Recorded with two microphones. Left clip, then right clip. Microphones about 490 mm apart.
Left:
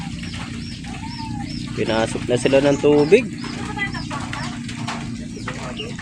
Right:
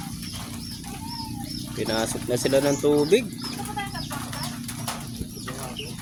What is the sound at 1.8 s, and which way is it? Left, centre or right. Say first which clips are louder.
Speech: left 6 dB; right.